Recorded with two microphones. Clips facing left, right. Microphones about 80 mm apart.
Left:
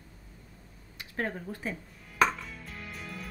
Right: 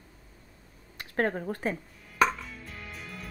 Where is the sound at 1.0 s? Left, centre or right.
Right.